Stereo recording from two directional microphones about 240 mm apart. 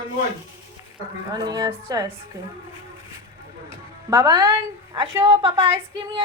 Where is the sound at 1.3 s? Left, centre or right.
Centre.